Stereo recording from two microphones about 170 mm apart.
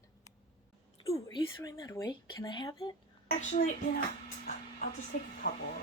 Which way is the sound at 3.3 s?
45° left (ahead or behind).